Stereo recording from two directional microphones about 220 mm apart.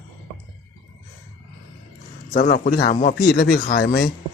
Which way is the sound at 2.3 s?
40° left (ahead or behind).